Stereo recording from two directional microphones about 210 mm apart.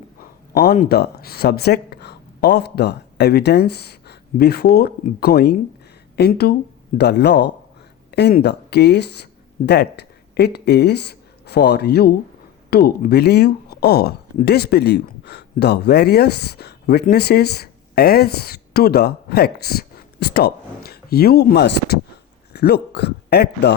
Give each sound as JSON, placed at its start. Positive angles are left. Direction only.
{"t": 0.5, "sound": "a man's voice", "side_deg": 45}